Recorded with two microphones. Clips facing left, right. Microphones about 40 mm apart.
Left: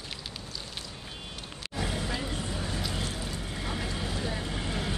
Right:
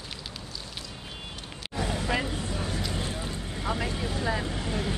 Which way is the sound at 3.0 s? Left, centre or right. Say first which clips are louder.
Right 2 dB; right.